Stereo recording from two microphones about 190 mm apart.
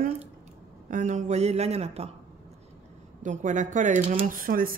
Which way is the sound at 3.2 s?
40° right (ahead or behind).